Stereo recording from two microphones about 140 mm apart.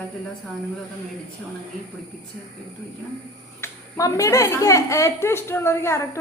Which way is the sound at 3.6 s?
25° left (ahead or behind).